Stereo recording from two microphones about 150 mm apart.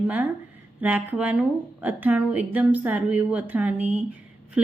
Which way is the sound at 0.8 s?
10° right (ahead or behind).